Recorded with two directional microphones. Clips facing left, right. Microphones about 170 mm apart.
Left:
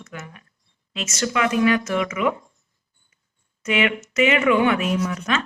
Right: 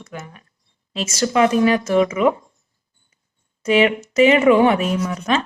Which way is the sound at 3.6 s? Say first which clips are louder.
Right 6 dB; 35° right (ahead or behind).